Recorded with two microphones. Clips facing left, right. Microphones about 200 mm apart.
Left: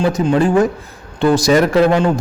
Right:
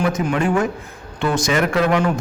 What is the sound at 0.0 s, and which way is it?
A man's voice, 30° left (ahead or behind).